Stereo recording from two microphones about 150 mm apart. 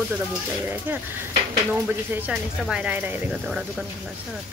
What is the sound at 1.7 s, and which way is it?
Speech, 10° right (ahead or behind).